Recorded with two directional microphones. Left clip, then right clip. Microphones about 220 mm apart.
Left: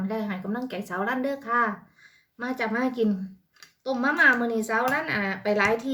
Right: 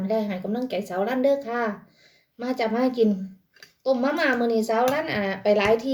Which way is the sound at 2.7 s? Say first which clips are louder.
Right 3 dB; 10° left (ahead or behind).